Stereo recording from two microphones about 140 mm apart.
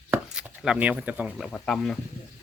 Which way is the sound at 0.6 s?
5° right (ahead or behind).